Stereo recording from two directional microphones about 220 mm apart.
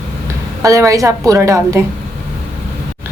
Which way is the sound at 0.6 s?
15° right (ahead or behind).